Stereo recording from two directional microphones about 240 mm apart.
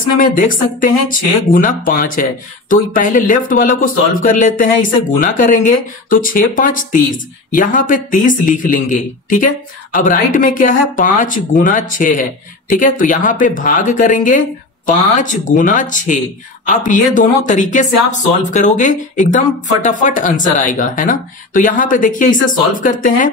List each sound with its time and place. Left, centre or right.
0.2 s speech: left